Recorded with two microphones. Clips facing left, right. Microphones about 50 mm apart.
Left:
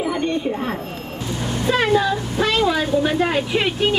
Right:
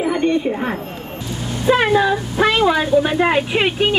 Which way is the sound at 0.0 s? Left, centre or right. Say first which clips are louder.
Right 4 dB; right.